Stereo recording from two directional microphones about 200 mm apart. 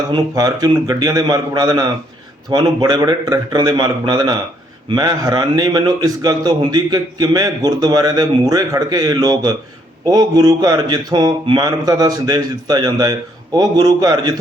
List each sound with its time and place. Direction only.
0.1 s a man's voice: 20° right (ahead or behind)